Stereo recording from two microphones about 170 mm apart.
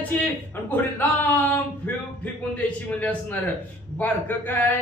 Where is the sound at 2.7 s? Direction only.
10° left (ahead or behind).